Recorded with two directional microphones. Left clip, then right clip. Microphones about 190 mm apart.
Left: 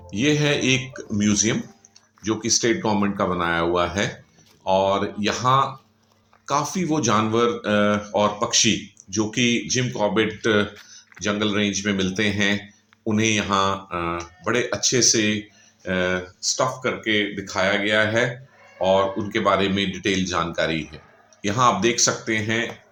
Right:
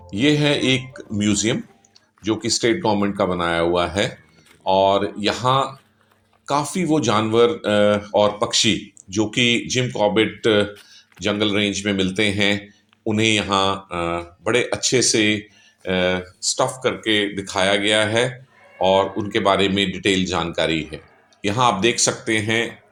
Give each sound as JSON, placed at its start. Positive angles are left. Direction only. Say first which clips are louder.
{"t": 0.1, "sound": "speech", "louder": "right 3 dB", "side_deg": -15}